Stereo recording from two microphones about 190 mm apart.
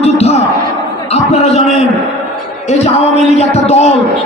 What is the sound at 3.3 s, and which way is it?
Speech, 35° left (ahead or behind).